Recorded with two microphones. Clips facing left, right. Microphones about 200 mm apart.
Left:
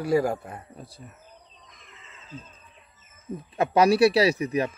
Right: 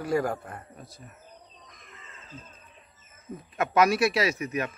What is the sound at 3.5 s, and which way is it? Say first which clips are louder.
Speech: left 3 dB; 30° left (ahead or behind).